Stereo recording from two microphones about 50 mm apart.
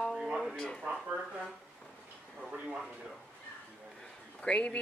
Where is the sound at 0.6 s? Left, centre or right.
Centre.